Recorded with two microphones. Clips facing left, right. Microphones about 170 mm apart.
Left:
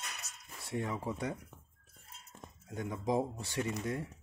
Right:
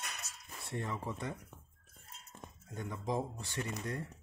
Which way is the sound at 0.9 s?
15° left (ahead or behind).